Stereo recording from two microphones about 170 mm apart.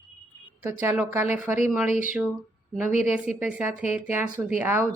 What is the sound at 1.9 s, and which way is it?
Speech, 50° left (ahead or behind).